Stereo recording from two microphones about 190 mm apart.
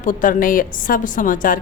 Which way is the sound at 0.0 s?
45° left (ahead or behind).